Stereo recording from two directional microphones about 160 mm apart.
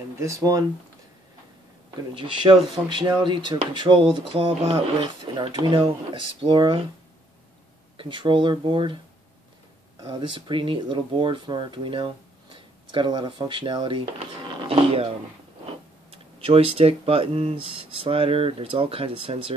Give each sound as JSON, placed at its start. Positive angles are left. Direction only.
{"t": 0.2, "sound": "speech", "side_deg": -20}
{"t": 2.1, "sound": "speech", "side_deg": -30}
{"t": 8.0, "sound": "speech", "side_deg": -30}
{"t": 10.0, "sound": "speech", "side_deg": -30}
{"t": 16.1, "sound": "a sound", "side_deg": -35}
{"t": 16.7, "sound": "speech", "side_deg": -40}